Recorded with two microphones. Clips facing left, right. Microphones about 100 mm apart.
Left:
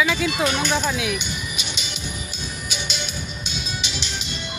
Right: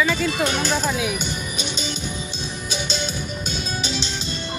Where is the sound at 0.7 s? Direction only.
Centre (ahead or behind).